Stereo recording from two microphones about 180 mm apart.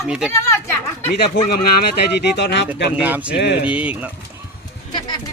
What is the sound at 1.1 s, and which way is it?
Speech, 60° left (ahead or behind).